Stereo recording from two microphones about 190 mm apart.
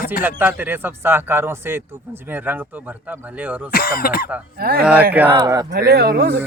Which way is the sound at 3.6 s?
50° left (ahead or behind).